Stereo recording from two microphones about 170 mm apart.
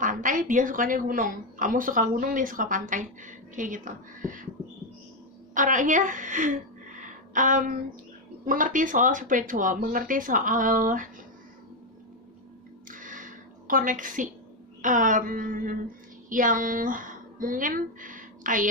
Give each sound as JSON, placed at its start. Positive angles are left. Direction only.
{"t": 0.0, "sound": "a woman's voice", "side_deg": -50}
{"t": 5.5, "sound": "a woman's voice", "side_deg": -50}
{"t": 12.8, "sound": "a sound", "side_deg": -50}
{"t": 14.8, "sound": "a woman's voice", "side_deg": -50}